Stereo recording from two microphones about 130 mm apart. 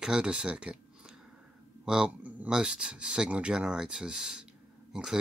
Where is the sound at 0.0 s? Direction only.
5° right (ahead or behind).